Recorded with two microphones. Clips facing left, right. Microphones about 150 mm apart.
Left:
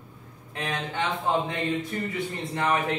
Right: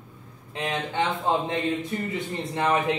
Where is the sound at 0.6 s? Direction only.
20° right (ahead or behind).